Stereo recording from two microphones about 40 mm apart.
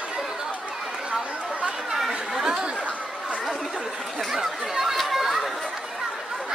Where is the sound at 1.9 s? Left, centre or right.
Centre.